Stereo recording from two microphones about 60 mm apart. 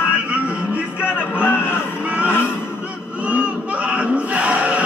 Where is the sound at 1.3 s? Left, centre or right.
Left.